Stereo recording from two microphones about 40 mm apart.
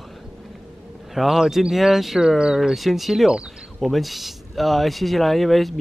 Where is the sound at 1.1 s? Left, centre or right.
Centre.